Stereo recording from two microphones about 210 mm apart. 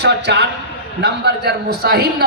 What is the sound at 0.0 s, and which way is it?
A man's voice, 55° right (ahead or behind).